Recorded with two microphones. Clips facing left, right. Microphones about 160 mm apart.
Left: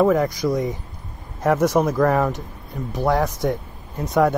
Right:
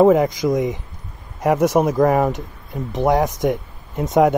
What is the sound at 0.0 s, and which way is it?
Speech, 20° right (ahead or behind).